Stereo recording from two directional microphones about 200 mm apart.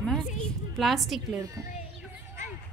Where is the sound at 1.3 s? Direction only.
15° right (ahead or behind).